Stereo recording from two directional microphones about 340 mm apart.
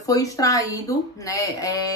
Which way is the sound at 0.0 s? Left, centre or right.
Centre.